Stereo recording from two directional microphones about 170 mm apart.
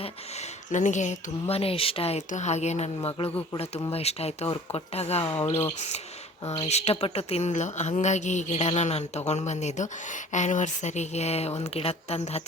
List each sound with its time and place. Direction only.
0.0 s speech: 40° left (ahead or behind)